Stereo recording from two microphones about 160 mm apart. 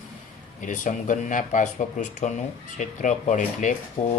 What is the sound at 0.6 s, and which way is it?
Speech, 50° left (ahead or behind).